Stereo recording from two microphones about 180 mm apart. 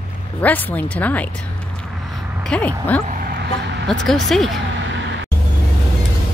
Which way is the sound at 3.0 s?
50° right (ahead or behind).